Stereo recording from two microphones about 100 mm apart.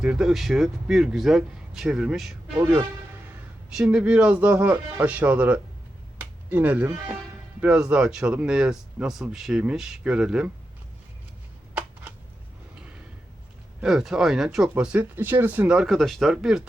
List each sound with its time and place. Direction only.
0.0 s a man's voice: 5° right (ahead or behind)
3.8 s speech: 10° right (ahead or behind)
6.1 s a sound: 20° right (ahead or behind)
7.6 s speech: 15° right (ahead or behind)
11.7 s a sound: 10° right (ahead or behind)
13.8 s a man's voice: 5° right (ahead or behind)
14.9 s speech: 20° right (ahead or behind)
15.8 s a man's voice: centre (ahead or behind)